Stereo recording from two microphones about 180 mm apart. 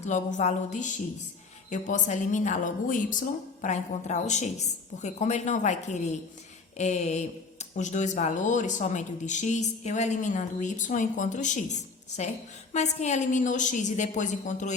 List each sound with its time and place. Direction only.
0.0 s a woman's voice: 45° left (ahead or behind)